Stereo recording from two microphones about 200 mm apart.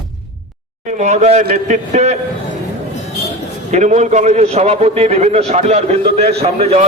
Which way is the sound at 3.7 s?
35° right (ahead or behind).